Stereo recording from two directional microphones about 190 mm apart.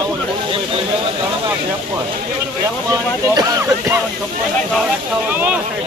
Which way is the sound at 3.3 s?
15° right (ahead or behind).